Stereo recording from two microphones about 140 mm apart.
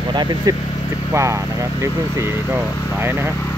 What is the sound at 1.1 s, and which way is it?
Speech, 20° right (ahead or behind).